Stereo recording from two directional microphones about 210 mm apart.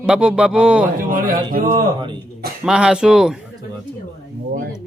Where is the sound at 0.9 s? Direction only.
40° right (ahead or behind).